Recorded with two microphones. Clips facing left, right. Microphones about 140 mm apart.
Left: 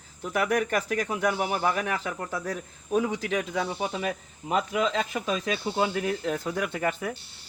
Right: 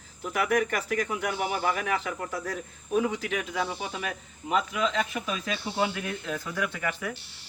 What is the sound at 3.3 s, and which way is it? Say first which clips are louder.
Speech: left 2 dB; 35° left (ahead or behind).